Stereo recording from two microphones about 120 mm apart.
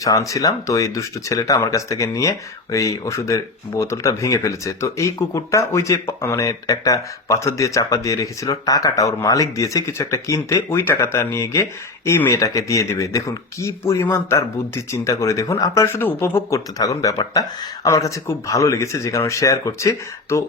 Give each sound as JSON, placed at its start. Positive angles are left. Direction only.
{"t": 0.0, "sound": "speech", "side_deg": 30}